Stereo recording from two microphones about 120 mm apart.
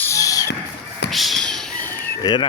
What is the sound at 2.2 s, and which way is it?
Speech, 40° left (ahead or behind).